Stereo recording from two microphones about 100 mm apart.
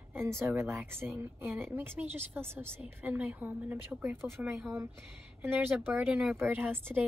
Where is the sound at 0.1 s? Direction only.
25° right (ahead or behind).